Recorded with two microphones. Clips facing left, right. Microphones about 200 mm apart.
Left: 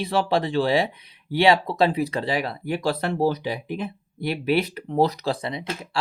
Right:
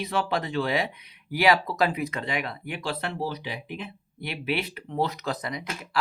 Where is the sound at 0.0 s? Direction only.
30° left (ahead or behind).